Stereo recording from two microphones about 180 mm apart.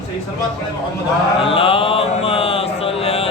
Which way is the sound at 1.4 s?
30° left (ahead or behind).